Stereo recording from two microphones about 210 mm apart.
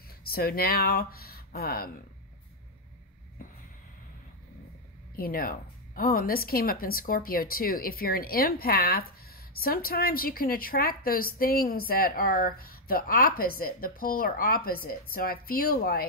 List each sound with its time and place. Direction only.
0.3 s speech: 45° left (ahead or behind)
5.1 s speech: 45° left (ahead or behind)